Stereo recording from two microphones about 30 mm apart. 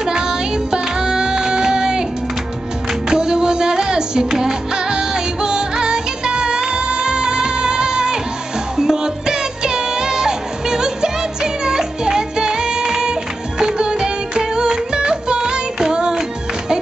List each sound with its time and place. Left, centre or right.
0.0 s music: right
3.1 s music: right